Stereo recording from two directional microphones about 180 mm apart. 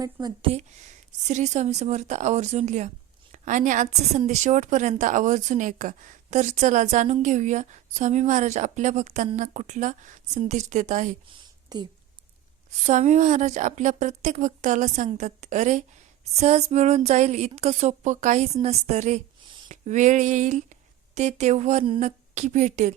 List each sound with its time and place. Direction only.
0.0 s speech: 25° right (ahead or behind)
1.2 s a woman's voice: 40° right (ahead or behind)
11.3 s a sound: 25° right (ahead or behind)
12.7 s a woman's voice: 40° right (ahead or behind)